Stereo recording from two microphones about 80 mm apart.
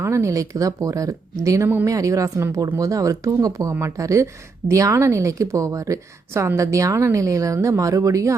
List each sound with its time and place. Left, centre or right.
0.0 s a woman's voice: right